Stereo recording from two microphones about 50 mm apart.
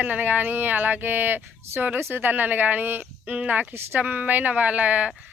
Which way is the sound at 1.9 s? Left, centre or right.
Right.